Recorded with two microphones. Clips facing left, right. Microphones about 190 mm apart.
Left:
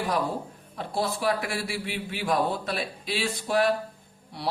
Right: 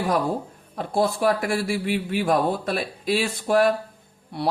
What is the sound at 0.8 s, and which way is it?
A man's voice, 50° right (ahead or behind).